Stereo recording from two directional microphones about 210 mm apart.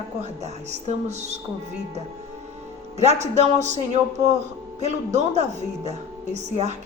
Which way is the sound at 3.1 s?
30° right (ahead or behind).